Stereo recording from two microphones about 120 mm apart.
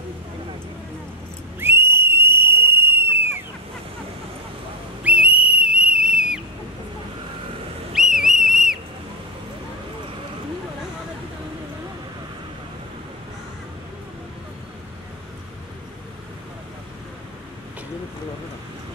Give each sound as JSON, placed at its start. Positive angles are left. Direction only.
{"t": 1.6, "sound": "a sound", "side_deg": -20}
{"t": 5.0, "sound": "whistle", "side_deg": -10}
{"t": 7.9, "sound": "whistle", "side_deg": -5}